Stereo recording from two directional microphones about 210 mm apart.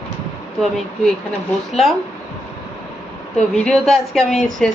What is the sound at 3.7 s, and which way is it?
Speech, centre (ahead or behind).